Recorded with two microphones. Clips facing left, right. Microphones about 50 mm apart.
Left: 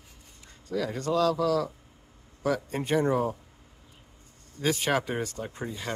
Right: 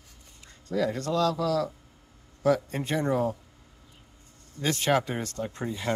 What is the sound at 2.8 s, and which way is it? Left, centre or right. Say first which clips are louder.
Speech: left 3 dB; centre.